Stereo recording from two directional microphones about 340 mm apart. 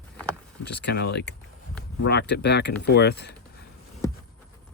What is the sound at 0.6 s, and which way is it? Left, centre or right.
Speech, left.